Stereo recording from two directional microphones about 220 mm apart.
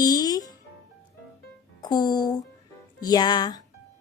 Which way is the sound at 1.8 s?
20° left (ahead or behind).